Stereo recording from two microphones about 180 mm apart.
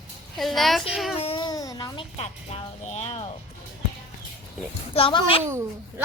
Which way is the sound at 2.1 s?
35° left (ahead or behind).